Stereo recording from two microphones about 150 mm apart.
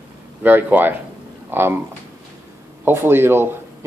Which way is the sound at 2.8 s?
15° right (ahead or behind).